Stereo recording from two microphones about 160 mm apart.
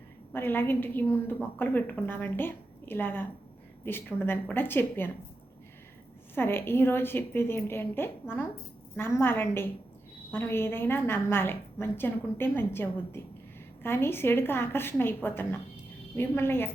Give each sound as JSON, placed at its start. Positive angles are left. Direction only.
{"t": 0.3, "sound": "a woman's voice", "side_deg": 15}
{"t": 6.3, "sound": "a woman's voice", "side_deg": 15}